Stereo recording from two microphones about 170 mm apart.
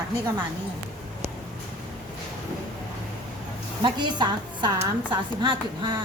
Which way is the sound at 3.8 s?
25° right (ahead or behind).